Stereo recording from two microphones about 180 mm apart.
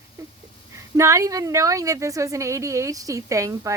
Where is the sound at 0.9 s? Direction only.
15° right (ahead or behind).